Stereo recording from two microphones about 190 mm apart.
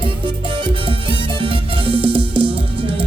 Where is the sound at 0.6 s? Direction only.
30° right (ahead or behind).